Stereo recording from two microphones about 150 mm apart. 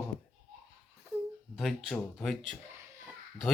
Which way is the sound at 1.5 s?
Centre (ahead or behind).